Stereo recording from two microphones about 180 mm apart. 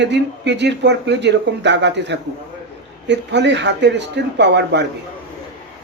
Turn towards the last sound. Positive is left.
turn(degrees=-75)  # may be behind; listen again after turning